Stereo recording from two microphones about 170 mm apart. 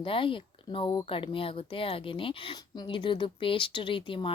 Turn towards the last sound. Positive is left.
turn(degrees=30)  # may be behind; listen again after turning